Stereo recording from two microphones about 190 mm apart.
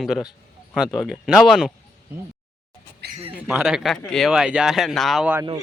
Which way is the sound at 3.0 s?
60° right (ahead or behind).